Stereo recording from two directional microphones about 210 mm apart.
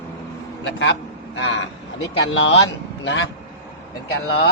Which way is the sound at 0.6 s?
55° left (ahead or behind).